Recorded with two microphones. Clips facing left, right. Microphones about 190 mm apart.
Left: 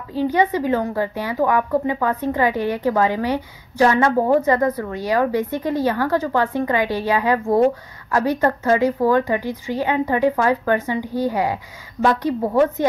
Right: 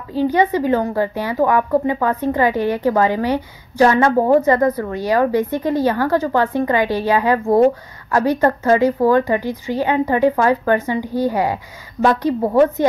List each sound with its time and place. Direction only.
0.1 s speech: 40° right (ahead or behind)